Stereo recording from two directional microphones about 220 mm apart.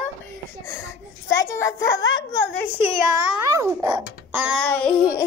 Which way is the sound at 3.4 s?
15° right (ahead or behind).